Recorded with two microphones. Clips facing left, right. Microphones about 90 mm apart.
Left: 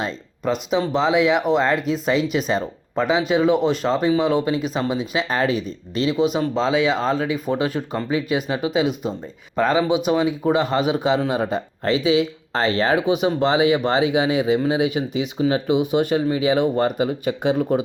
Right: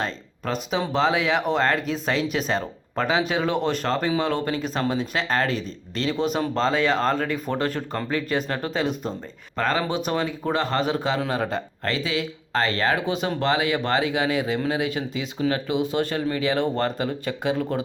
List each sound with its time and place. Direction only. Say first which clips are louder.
0.0 s speech: left 4 dB; 5° left (ahead or behind)